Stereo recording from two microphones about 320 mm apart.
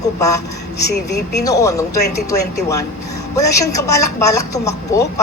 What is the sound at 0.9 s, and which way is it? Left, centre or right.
Speech, left.